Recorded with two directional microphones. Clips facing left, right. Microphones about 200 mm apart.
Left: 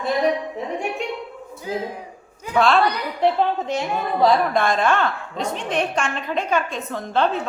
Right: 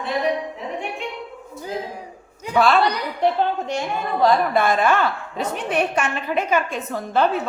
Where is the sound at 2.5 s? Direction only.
Centre (ahead or behind).